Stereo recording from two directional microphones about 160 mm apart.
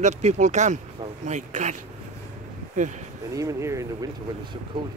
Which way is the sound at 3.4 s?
20° right (ahead or behind).